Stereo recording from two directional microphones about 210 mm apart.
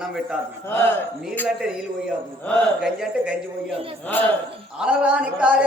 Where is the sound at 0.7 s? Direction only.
10° left (ahead or behind).